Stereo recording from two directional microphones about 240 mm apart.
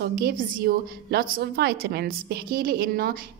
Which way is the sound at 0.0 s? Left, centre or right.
Right.